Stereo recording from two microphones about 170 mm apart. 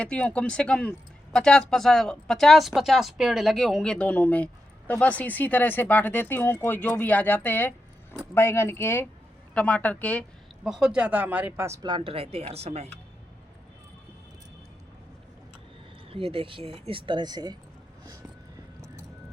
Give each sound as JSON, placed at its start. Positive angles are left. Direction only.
{"t": 0.0, "sound": "speech", "side_deg": 5}
{"t": 10.6, "sound": "speech", "side_deg": -5}
{"t": 16.0, "sound": "speech", "side_deg": -35}